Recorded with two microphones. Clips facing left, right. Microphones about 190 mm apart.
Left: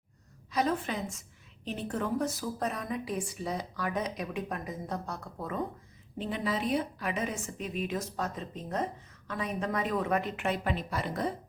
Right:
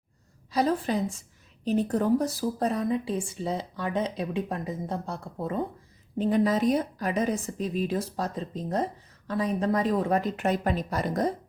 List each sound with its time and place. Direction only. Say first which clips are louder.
0.5 s a woman's voice: right 5 dB; 35° right (ahead or behind)
6.1 s a woman's voice: right 9 dB; 40° right (ahead or behind)